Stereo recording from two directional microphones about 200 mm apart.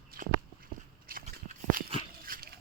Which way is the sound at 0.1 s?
45° right (ahead or behind).